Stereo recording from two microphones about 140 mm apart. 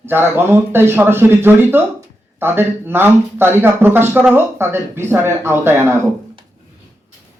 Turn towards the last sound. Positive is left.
turn(degrees=-20)  # may be behind; listen again after turning